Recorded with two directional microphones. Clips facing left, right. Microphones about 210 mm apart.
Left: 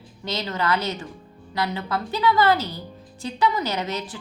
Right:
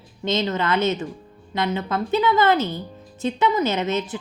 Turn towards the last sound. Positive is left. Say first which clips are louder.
# right 5 dB
turn(degrees=-20)  # may be behind; listen again after turning